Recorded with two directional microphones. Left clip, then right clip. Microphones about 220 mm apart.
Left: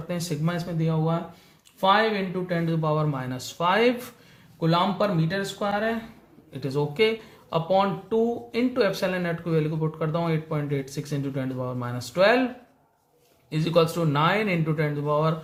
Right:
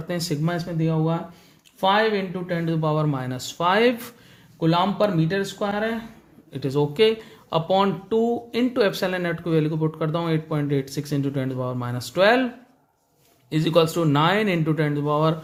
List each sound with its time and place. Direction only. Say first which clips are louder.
0.1 s speech: right 4 dB; 35° right (ahead or behind)
13.5 s speech: right 3 dB; 35° right (ahead or behind)